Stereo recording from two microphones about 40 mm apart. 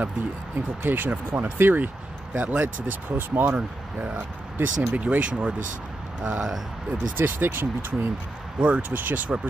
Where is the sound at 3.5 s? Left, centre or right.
Right.